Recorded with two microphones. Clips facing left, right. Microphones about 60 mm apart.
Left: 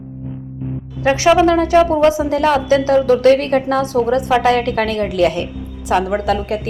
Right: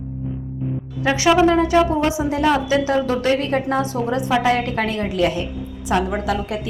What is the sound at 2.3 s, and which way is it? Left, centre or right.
A woman's voice, left.